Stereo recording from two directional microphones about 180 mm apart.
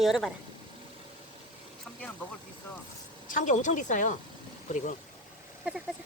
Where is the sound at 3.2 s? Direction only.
45° left (ahead or behind).